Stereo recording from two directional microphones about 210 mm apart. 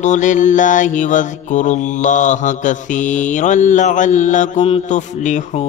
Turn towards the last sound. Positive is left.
turn(degrees=35)  # may be behind; listen again after turning